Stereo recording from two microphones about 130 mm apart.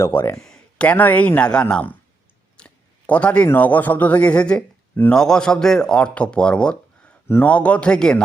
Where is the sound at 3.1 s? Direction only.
10° left (ahead or behind).